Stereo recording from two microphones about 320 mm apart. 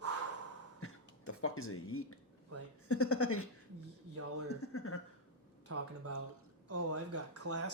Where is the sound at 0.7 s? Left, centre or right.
Left.